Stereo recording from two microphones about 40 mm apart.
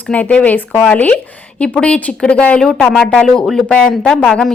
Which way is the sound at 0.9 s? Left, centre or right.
Left.